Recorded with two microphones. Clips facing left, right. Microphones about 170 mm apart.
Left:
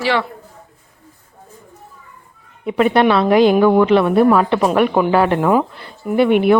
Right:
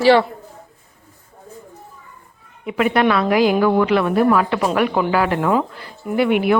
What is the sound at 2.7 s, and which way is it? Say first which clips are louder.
A woman's voice: left 3 dB; 30° left (ahead or behind).